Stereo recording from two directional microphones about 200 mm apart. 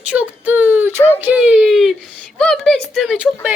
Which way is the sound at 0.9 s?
10° left (ahead or behind).